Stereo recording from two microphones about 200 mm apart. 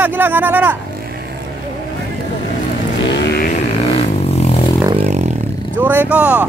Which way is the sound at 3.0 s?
55° left (ahead or behind).